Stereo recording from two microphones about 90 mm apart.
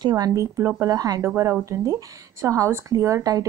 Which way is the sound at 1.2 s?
30° right (ahead or behind).